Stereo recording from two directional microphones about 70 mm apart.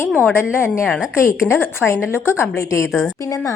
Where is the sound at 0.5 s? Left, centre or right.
Left.